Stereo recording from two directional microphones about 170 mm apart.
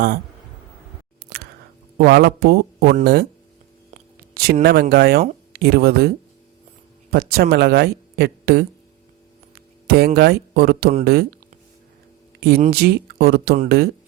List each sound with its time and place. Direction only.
2.0 s speech: 70° right (ahead or behind)
4.6 s speech: 70° right (ahead or behind)
9.8 s speech: 65° right (ahead or behind)
12.4 s speech: 70° right (ahead or behind)